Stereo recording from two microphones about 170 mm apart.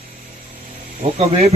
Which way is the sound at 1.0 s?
35° right (ahead or behind).